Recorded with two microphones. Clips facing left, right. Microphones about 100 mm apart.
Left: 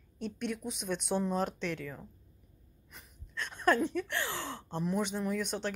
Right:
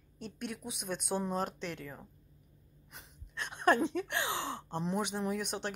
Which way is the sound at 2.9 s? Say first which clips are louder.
Left 2 dB; 15° right (ahead or behind).